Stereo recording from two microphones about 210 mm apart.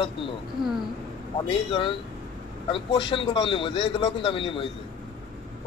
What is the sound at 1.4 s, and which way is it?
Speech, 25° left (ahead or behind).